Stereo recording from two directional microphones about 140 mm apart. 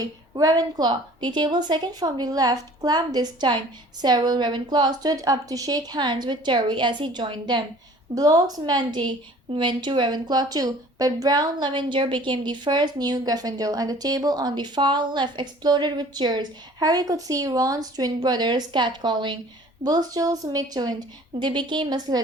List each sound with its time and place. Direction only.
0.0 s a woman's voice: 25° right (ahead or behind)